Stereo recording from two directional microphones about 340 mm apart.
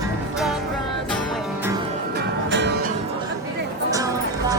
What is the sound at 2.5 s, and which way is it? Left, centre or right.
Music, right.